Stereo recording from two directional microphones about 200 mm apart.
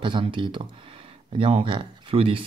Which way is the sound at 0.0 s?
25° right (ahead or behind).